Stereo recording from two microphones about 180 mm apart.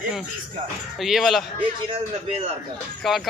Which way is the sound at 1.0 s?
Centre (ahead or behind).